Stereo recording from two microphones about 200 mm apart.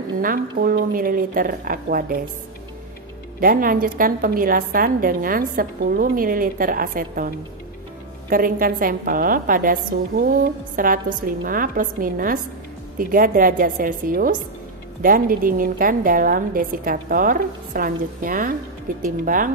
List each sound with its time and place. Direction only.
0.2 s a woman's voice: 45° right (ahead or behind)
3.3 s a woman's voice: 45° right (ahead or behind)